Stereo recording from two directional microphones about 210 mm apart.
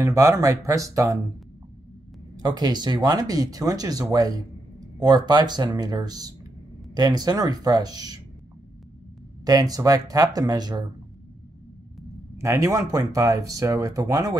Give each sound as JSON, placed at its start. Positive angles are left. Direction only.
{"t": 0.0, "sound": "speech", "side_deg": -15}
{"t": 2.3, "sound": "speech", "side_deg": -20}
{"t": 9.4, "sound": "speech", "side_deg": -15}
{"t": 12.4, "sound": "speech", "side_deg": -15}